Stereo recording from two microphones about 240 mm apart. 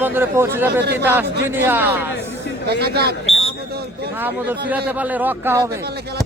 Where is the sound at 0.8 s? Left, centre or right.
Right.